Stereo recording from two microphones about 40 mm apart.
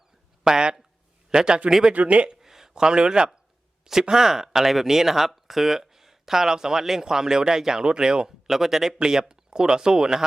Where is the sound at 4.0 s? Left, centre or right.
Centre.